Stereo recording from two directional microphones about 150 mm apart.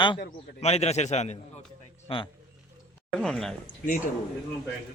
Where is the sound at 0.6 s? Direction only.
45° left (ahead or behind).